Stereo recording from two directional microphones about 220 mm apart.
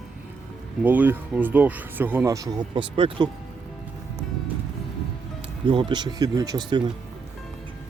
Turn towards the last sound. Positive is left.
turn(degrees=-20)  # may be behind; listen again after turning